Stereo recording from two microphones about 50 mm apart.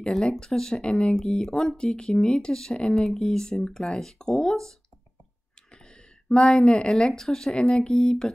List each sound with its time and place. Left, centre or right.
0.0 s speech: centre
5.7 s a sound: centre
6.9 s speech: centre